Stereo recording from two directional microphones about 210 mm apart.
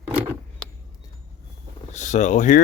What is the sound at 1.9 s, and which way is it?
Speech, 35° left (ahead or behind).